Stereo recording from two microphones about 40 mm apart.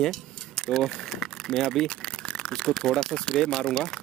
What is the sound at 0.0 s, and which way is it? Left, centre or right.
Speech, centre.